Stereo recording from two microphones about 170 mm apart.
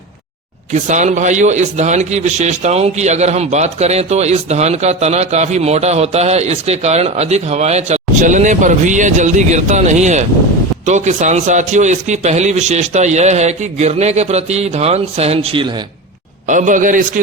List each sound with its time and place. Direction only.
0.7 s a man's voice: 45° right (ahead or behind)
16.5 s a man's voice: 50° right (ahead or behind)